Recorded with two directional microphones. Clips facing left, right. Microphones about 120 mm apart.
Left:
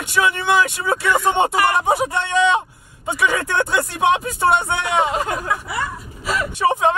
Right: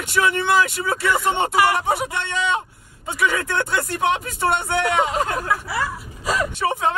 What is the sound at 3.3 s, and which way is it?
Speech, 15° left (ahead or behind).